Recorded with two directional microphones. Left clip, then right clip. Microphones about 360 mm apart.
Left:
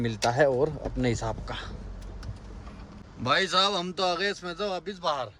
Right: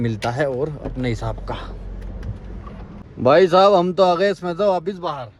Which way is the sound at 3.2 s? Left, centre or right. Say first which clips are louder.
Right 11 dB; centre.